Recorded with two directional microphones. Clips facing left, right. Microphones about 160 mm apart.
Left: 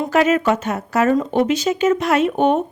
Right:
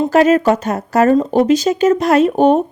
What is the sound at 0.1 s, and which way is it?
A woman's voice, 35° right (ahead or behind).